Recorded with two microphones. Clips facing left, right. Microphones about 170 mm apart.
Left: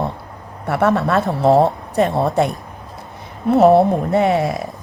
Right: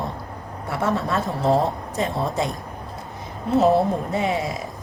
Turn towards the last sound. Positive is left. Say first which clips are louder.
# left 7 dB
turn(degrees=60)  # may be behind; listen again after turning